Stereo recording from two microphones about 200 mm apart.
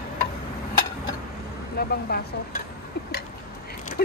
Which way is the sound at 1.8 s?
50° left (ahead or behind).